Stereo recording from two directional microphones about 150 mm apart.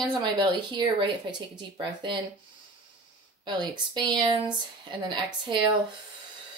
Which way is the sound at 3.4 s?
30° right (ahead or behind).